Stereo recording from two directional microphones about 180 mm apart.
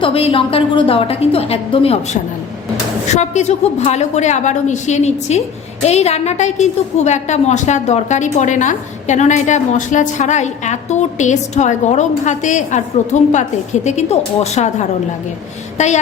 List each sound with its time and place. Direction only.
0.0 s a woman's voice: 30° left (ahead or behind)
3.2 s a woman's voice: 40° left (ahead or behind)